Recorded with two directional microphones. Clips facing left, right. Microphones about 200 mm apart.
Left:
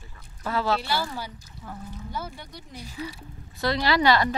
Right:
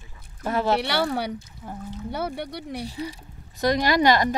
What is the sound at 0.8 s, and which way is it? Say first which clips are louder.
Speech: right 5 dB; 70° right (ahead or behind).